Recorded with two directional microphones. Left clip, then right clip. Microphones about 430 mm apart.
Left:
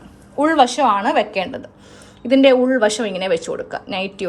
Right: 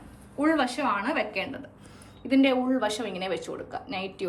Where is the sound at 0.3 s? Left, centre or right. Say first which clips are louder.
Left 11 dB; centre.